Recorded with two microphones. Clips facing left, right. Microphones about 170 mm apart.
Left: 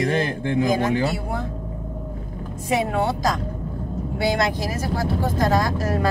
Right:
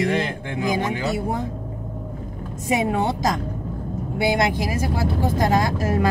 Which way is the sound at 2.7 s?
20° right (ahead or behind).